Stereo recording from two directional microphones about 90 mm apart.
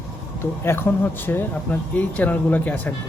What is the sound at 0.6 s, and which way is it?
Speech, 25° left (ahead or behind).